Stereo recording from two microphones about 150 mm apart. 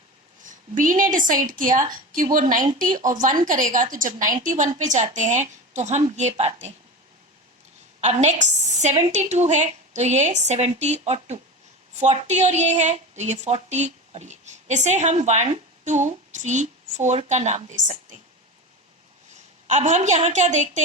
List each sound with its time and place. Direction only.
0.4 s a woman's voice: 60° right (ahead or behind)
8.0 s a woman's voice: 50° right (ahead or behind)
19.6 s a woman's voice: 55° right (ahead or behind)